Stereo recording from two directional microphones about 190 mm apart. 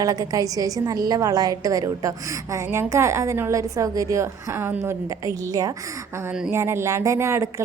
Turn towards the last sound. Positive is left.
turn(degrees=-15)  # may be behind; listen again after turning